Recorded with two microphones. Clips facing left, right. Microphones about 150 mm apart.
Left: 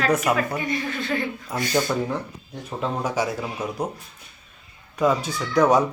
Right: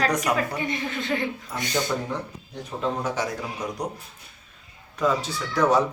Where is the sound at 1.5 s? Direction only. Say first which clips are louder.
Left 4 dB; 10° left (ahead or behind).